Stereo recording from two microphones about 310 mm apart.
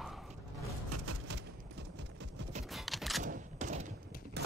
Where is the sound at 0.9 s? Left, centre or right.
Right.